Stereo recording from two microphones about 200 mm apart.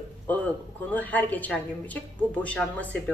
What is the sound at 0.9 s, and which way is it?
Speech, 10° left (ahead or behind).